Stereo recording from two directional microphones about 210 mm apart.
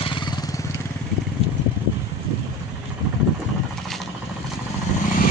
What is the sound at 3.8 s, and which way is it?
Vehicle, centre (ahead or behind).